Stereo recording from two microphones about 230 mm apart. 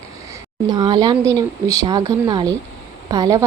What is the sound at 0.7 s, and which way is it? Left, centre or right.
A woman's voice, centre.